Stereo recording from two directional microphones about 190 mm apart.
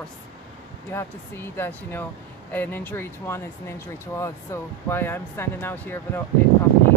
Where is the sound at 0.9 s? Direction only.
10° left (ahead or behind).